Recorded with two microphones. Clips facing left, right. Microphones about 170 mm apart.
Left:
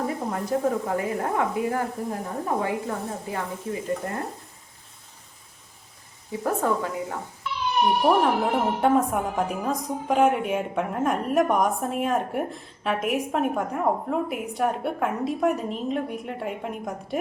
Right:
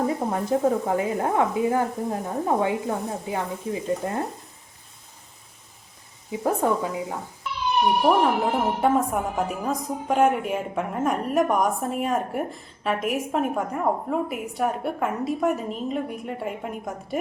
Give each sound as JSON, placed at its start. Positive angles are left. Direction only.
{"t": 0.1, "sound": "speech", "side_deg": -25}
{"t": 6.3, "sound": "speech", "side_deg": -15}
{"t": 8.0, "sound": "a woman's voice", "side_deg": 0}